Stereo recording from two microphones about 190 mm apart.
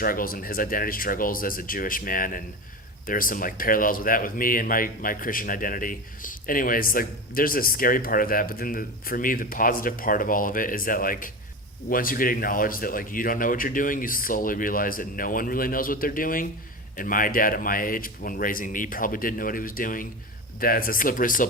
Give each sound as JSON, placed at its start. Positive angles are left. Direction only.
{"t": 0.0, "sound": "speech", "side_deg": 50}